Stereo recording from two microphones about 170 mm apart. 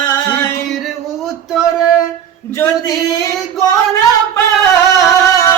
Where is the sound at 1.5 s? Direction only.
5° right (ahead or behind).